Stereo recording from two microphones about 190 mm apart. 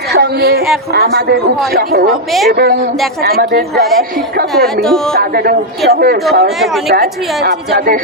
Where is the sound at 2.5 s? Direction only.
55° right (ahead or behind).